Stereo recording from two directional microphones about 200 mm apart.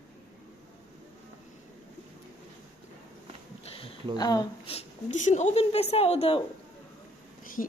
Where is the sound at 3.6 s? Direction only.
30° left (ahead or behind).